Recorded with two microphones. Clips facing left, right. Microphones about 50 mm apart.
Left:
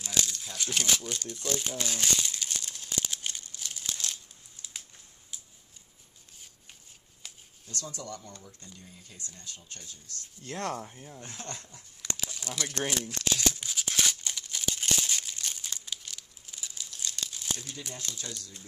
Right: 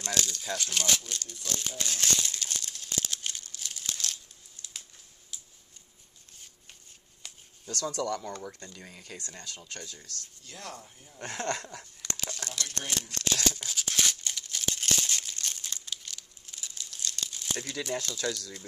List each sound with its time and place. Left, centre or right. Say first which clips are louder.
0.0 s speech: right 1 dB; centre
0.6 s crumpling: left 2 dB; centre
7.2 s a sound: even; centre
7.7 s speech: right 8 dB; right
8.7 s speech: right 6 dB; right
10.4 s speech: left 10 dB; left
11.1 s speech: right 11 dB; right
12.4 s speech: left 6 dB; centre
13.1 s tearing: even; centre
14.8 s crumpling: even; centre
17.9 s speech: right 11 dB; right